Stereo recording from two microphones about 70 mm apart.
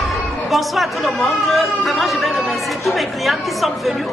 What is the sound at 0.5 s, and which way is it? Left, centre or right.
Speech, centre.